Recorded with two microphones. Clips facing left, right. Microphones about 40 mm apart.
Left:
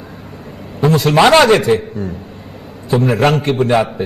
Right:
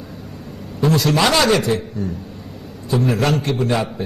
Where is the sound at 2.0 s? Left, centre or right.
Left.